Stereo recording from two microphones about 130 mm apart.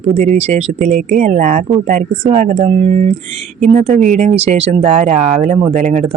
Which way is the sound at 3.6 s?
65° right (ahead or behind).